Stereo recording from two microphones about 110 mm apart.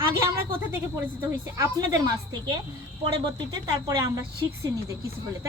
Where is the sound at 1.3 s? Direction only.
30° right (ahead or behind).